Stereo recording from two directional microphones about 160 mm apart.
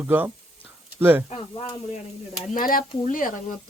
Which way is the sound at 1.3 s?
35° left (ahead or behind).